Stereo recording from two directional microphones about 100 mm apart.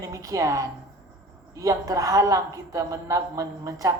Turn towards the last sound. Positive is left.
turn(degrees=-35)  # may be behind; listen again after turning